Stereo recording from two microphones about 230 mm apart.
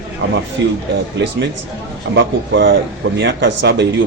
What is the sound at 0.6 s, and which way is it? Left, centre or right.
Speech, right.